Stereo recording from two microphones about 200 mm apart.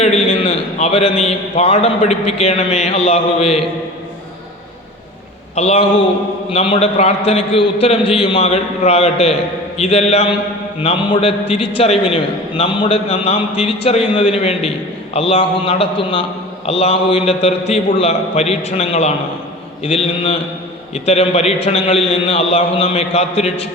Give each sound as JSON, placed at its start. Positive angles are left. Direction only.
{"t": 0.0, "sound": "a man's voice", "side_deg": 30}
{"t": 5.5, "sound": "a man's voice", "side_deg": 30}